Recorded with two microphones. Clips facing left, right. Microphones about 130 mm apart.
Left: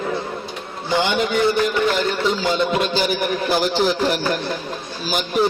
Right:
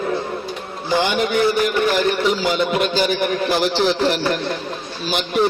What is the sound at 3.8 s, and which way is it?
Speech, 10° left (ahead or behind).